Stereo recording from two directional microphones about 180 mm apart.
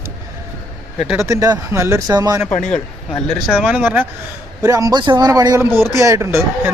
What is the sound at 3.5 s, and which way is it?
Speech, 5° right (ahead or behind).